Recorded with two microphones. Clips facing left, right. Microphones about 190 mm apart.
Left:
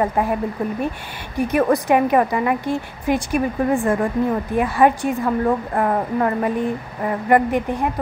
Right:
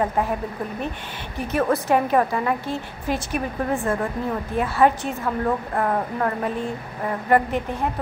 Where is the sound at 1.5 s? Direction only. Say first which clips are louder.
Left 3 dB; 15° left (ahead or behind).